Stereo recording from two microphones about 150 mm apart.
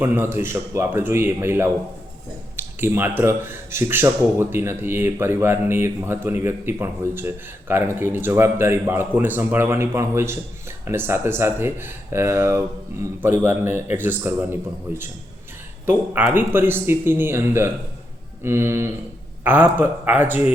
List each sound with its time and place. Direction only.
0.0 s speech: 15° right (ahead or behind)